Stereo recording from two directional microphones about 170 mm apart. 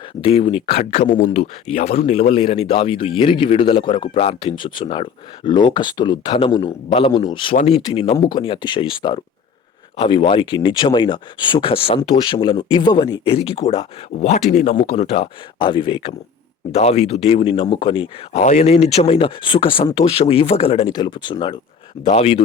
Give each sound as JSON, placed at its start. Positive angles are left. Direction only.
{"t": 0.2, "sound": "speech", "side_deg": 35}
{"t": 0.9, "sound": "speech", "side_deg": 50}
{"t": 1.7, "sound": "speech", "side_deg": 35}
{"t": 6.9, "sound": "speech", "side_deg": 35}
{"t": 14.8, "sound": "speech", "side_deg": 35}